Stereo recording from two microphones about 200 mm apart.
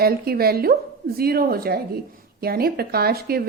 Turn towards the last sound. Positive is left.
turn(degrees=-50)  # may be behind; listen again after turning